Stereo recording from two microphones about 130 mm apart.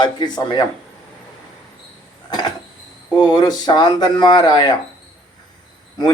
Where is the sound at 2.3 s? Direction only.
30° left (ahead or behind).